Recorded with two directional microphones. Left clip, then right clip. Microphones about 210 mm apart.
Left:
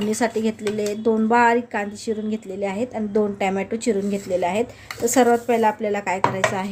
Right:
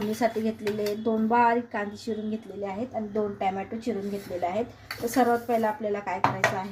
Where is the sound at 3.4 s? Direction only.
35° left (ahead or behind).